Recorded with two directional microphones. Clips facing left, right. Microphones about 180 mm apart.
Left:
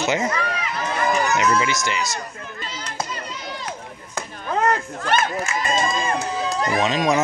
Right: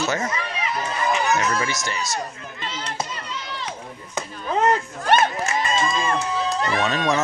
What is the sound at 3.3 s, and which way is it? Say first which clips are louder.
Chop: even; 40° left (ahead or behind).